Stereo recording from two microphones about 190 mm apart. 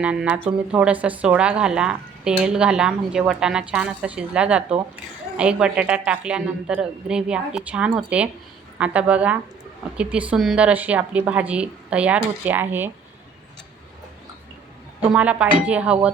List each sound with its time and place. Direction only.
0.0 s a woman's voice: 5° right (ahead or behind)
15.1 s a woman's voice: 5° right (ahead or behind)